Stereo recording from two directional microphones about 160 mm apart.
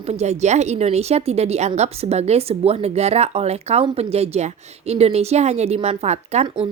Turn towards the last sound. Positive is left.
turn(degrees=-40)  # may be behind; listen again after turning